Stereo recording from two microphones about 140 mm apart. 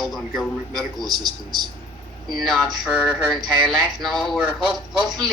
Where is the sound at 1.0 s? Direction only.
30° right (ahead or behind).